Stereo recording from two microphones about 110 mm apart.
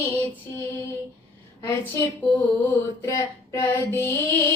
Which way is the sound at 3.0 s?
25° left (ahead or behind).